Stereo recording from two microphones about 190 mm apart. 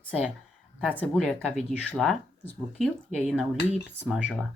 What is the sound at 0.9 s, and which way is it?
Speech, 5° left (ahead or behind).